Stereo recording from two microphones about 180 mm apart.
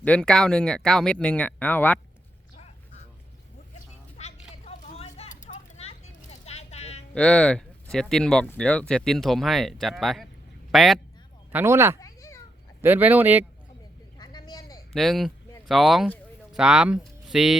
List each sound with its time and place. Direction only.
0.0 s speech: 5° left (ahead or behind)
4.2 s vehicle: 40° left (ahead or behind)
7.1 s a man's voice: 5° left (ahead or behind)
11.5 s speech: 15° right (ahead or behind)
11.9 s a sound: 20° left (ahead or behind)
12.8 s speech: 10° right (ahead or behind)
14.2 s a sound: 25° left (ahead or behind)
14.9 s speech: centre (ahead or behind)